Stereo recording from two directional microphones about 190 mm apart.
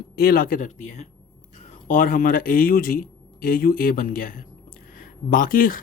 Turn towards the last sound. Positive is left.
turn(degrees=50)  # may be behind; listen again after turning